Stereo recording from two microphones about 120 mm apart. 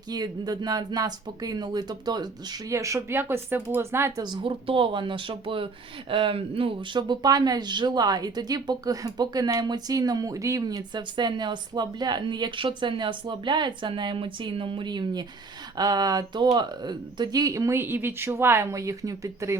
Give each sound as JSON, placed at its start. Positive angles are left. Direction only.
{"t": 0.1, "sound": "speech", "side_deg": -35}
{"t": 4.2, "sound": "speech", "side_deg": -40}